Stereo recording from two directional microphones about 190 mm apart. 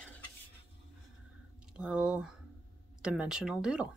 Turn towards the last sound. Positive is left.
turn(degrees=-5)  # may be behind; listen again after turning